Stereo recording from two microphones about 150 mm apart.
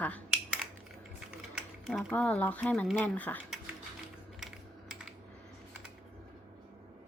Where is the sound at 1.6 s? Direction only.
Centre (ahead or behind).